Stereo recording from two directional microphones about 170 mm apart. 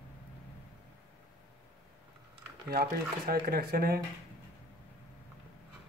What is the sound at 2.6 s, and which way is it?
Speech, 65° right (ahead or behind).